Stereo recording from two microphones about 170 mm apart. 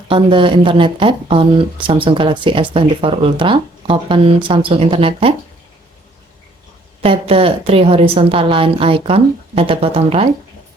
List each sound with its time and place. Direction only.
0.1 s speech: 30° right (ahead or behind)
7.0 s speech: 35° right (ahead or behind)